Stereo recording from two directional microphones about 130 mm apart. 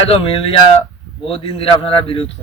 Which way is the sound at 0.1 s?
45° left (ahead or behind).